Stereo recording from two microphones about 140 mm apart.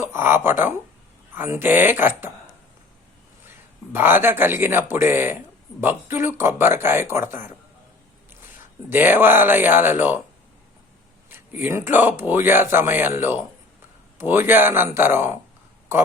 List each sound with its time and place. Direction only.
0.0 s speech: 15° right (ahead or behind)
3.9 s speech: 15° right (ahead or behind)
8.9 s speech: 15° right (ahead or behind)
11.3 s speech: 15° right (ahead or behind)